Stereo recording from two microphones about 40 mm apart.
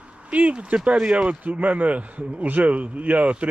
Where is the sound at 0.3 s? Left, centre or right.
Right.